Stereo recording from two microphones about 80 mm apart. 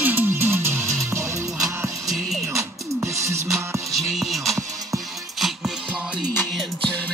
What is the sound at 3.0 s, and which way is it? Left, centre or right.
Music, right.